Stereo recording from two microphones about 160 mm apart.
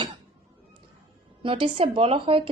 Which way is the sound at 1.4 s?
35° right (ahead or behind).